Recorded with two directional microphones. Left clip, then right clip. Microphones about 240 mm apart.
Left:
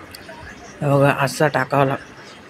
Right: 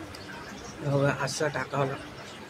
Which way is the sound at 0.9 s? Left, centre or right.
Left.